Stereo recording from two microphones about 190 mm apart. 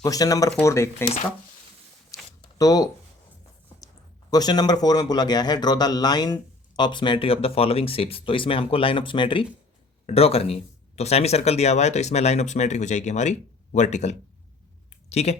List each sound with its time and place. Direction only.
0.0 s a man's voice: 20° left (ahead or behind)
2.0 s shuffling cards: 15° left (ahead or behind)
4.3 s a man's voice: 20° left (ahead or behind)